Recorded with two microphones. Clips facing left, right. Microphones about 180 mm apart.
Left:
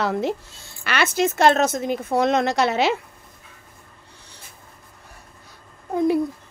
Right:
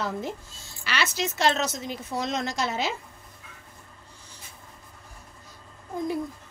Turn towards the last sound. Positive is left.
turn(degrees=70)  # may be behind; listen again after turning